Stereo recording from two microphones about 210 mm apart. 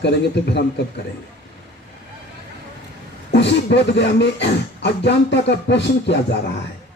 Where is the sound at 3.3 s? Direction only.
55° left (ahead or behind).